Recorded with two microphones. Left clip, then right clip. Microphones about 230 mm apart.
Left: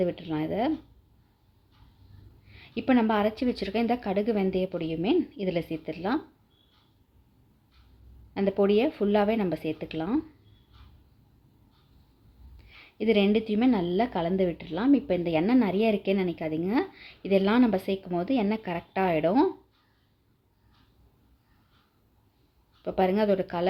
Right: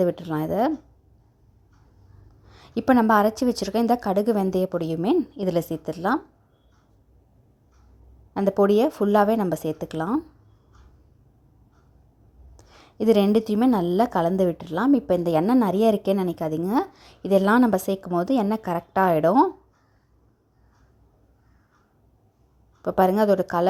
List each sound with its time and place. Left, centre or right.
0.0 s a woman's voice: right
2.7 s a woman's voice: right
8.3 s a woman's voice: right
12.8 s a woman's voice: right
22.8 s a woman's voice: right